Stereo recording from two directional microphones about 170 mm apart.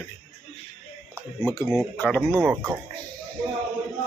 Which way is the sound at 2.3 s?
15° right (ahead or behind).